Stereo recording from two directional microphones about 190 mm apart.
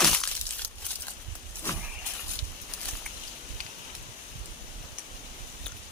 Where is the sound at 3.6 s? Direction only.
45° right (ahead or behind).